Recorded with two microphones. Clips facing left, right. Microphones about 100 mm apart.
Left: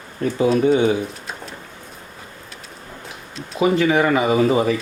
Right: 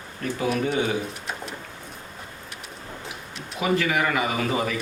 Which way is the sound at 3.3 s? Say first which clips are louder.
Left 6 dB; 30° left (ahead or behind).